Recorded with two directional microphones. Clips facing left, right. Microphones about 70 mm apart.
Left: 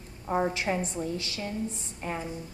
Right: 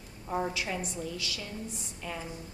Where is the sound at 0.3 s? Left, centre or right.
Left.